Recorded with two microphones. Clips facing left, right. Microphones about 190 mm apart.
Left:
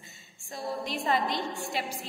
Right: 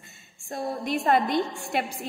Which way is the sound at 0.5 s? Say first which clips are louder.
Right 5 dB; 55° right (ahead or behind).